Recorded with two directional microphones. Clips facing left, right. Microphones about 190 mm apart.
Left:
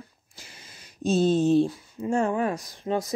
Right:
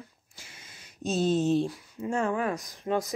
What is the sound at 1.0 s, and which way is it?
Speech, 30° left (ahead or behind).